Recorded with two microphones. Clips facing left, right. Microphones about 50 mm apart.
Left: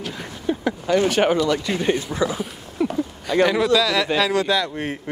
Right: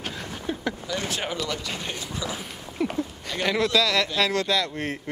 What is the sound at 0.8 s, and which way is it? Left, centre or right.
Speech, left.